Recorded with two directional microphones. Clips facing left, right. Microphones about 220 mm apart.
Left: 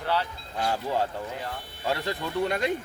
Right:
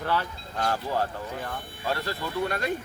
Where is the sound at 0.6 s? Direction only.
15° left (ahead or behind).